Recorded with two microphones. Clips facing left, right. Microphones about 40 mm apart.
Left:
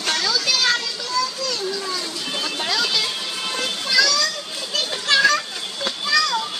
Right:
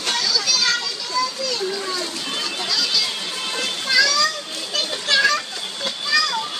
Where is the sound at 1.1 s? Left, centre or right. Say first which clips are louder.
Right 1 dB; centre.